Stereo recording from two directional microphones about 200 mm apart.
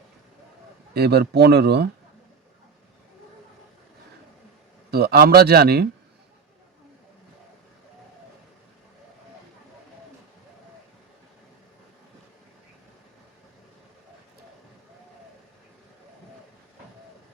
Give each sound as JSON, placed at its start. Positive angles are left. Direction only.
{"t": 0.9, "sound": "speech", "side_deg": -55}
{"t": 4.9, "sound": "a man's voice", "side_deg": -50}